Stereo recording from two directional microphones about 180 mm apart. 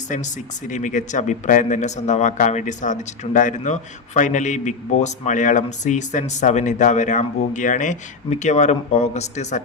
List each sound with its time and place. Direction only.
0.7 s a man's voice: 45° left (ahead or behind)